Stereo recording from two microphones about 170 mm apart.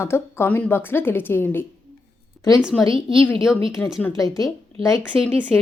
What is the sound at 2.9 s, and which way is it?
Speech, 30° right (ahead or behind).